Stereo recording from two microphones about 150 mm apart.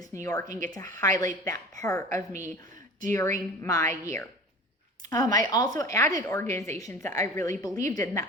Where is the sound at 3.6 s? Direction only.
20° left (ahead or behind).